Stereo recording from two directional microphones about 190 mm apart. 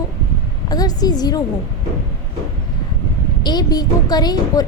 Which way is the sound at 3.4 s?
20° left (ahead or behind).